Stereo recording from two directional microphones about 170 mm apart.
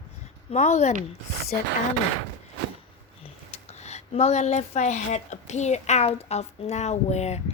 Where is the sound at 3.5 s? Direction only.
40° left (ahead or behind).